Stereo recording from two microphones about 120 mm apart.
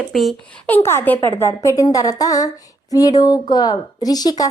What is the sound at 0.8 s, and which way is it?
A woman's voice, 20° left (ahead or behind).